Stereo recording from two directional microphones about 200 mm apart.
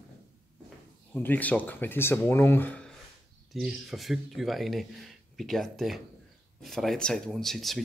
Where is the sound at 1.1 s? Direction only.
10° left (ahead or behind).